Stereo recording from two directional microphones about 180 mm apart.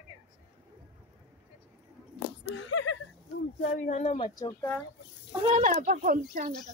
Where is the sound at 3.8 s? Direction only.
45° left (ahead or behind).